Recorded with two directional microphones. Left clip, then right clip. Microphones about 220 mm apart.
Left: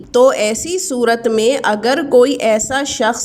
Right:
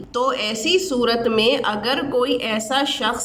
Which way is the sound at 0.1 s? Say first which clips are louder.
Left 10 dB; 35° left (ahead or behind).